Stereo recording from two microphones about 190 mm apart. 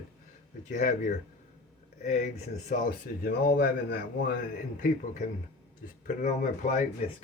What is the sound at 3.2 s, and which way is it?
A man's voice, 55° left (ahead or behind).